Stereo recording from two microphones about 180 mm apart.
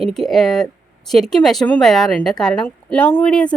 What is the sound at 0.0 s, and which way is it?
Speech, centre (ahead or behind).